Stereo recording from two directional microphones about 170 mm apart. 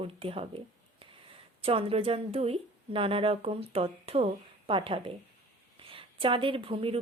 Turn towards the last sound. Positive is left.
turn(degrees=-30)  # may be behind; listen again after turning